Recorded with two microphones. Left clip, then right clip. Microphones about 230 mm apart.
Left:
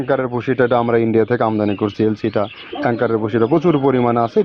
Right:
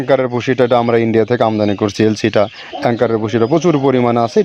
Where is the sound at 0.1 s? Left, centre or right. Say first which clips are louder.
Right 5 dB; right.